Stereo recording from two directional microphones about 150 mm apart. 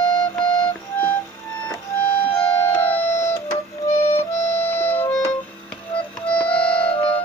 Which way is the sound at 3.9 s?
50° left (ahead or behind).